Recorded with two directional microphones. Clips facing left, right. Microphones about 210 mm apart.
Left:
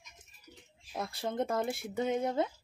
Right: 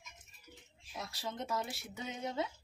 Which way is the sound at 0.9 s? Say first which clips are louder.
Left 8 dB; 55° left (ahead or behind).